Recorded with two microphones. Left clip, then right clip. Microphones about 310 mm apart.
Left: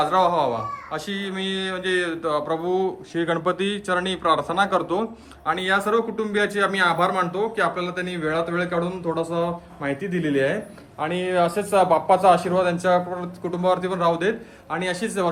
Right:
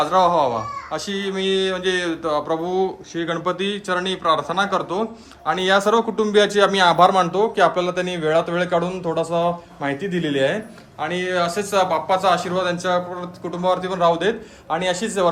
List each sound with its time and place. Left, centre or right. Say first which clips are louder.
0.0 s a man's voice: right 3 dB; centre